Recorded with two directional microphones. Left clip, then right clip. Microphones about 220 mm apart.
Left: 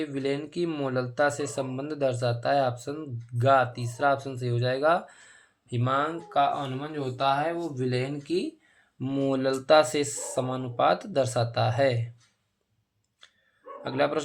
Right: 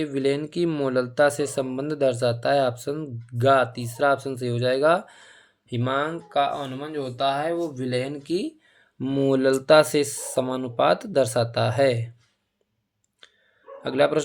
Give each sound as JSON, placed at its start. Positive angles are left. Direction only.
{"t": 0.0, "sound": "speech", "side_deg": -50}
{"t": 13.8, "sound": "speech", "side_deg": -50}